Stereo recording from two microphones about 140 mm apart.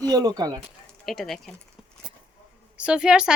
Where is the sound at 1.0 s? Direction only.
Centre (ahead or behind).